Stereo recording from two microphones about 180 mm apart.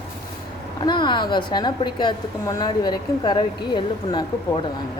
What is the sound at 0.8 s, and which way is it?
A woman's voice, 25° left (ahead or behind).